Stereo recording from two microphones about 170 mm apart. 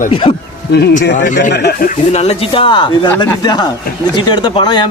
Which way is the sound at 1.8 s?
45° left (ahead or behind).